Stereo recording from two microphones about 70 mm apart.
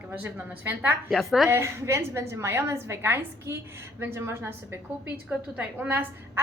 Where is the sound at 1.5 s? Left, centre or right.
Right.